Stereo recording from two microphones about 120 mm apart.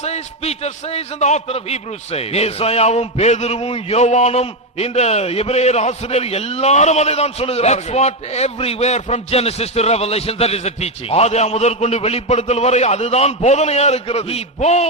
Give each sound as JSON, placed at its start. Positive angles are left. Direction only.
{"t": 0.0, "sound": "a man's voice", "side_deg": 60}